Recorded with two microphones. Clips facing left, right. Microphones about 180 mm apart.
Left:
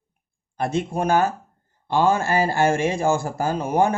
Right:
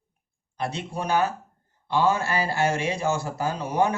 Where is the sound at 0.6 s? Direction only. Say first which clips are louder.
Left 7 dB; 50° left (ahead or behind).